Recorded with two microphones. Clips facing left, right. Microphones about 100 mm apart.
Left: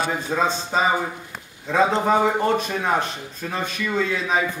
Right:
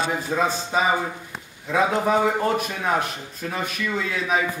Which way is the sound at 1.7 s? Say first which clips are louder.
Left 2 dB; 20° left (ahead or behind).